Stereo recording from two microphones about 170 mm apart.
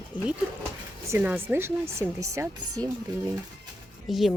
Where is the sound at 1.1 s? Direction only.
10° right (ahead or behind).